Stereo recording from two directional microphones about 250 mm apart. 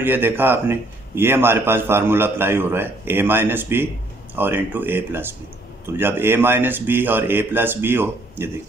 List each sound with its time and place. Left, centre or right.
0.0 s a man's voice: centre